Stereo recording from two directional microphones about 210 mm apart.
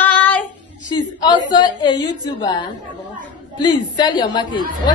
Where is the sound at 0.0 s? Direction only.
10° left (ahead or behind).